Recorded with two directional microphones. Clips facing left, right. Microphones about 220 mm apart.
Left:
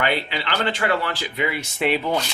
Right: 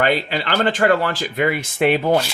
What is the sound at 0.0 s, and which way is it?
Speech, 45° right (ahead or behind).